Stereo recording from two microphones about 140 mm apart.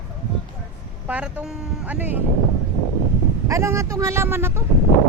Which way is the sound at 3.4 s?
20° right (ahead or behind).